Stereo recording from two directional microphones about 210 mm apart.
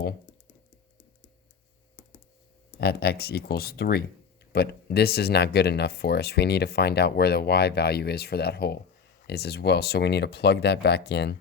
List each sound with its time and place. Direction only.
2.8 s speech: 50° left (ahead or behind)